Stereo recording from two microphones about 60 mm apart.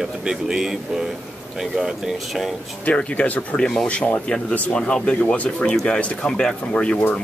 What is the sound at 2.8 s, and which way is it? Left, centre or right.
Speech, left.